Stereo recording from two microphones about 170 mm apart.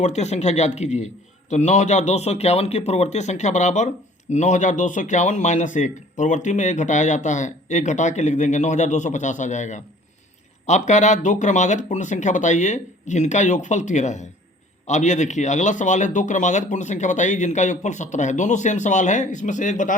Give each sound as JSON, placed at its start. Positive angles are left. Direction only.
{"t": 0.0, "sound": "a man's voice", "side_deg": 40}